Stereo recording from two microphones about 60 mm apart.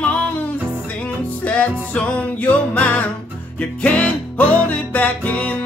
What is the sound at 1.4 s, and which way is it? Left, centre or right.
Music, left.